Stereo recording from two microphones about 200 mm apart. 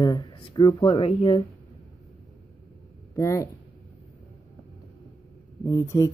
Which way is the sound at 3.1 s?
15° left (ahead or behind).